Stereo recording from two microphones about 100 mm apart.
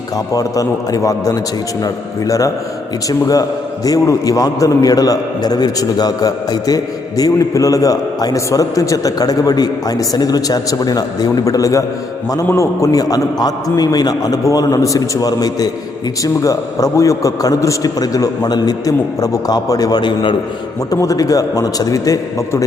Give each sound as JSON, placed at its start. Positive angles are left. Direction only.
{"t": 0.3, "sound": "a man's voice", "side_deg": 35}
{"t": 20.9, "sound": "a man's voice", "side_deg": 35}